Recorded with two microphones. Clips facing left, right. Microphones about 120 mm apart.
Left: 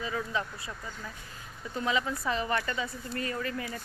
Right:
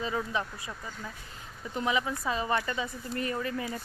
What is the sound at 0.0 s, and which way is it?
Speech, 20° right (ahead or behind).